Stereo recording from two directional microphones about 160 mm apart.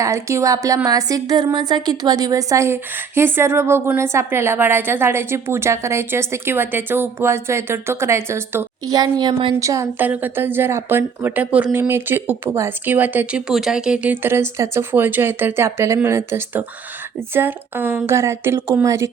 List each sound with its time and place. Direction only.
0.0 s a woman's voice: 20° right (ahead or behind)